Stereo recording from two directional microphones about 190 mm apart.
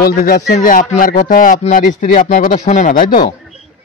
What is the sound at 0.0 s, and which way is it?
Speech, 50° left (ahead or behind).